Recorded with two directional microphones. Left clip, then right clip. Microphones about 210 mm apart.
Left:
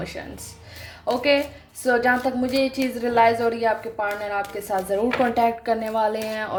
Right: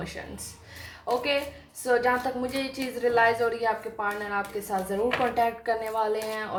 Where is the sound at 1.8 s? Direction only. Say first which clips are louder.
Left 4 dB; 50° left (ahead or behind).